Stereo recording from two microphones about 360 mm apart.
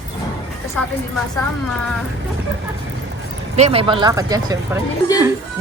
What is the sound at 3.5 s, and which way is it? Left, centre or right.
A woman's voice, centre.